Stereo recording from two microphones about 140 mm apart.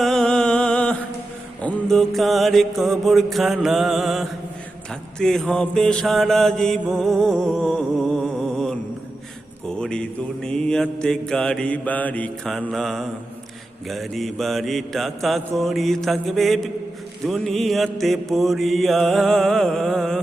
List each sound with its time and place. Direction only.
0.0 s music: 5° left (ahead or behind)
1.6 s mantra: 5° left (ahead or behind)